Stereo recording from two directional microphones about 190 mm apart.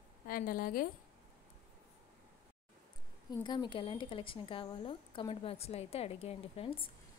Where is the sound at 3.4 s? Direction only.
25° left (ahead or behind).